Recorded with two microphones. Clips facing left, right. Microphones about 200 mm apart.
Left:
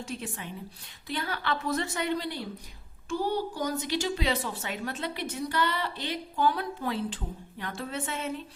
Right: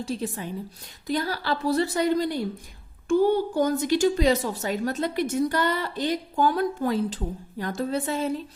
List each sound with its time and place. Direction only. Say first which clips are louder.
0.0 s a woman's voice: right 7 dB; 35° right (ahead or behind)